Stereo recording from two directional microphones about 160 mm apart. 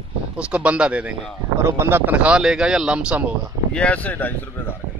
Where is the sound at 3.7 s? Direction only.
10° left (ahead or behind).